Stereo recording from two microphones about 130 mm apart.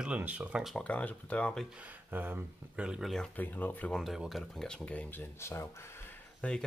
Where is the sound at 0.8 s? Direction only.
10° left (ahead or behind).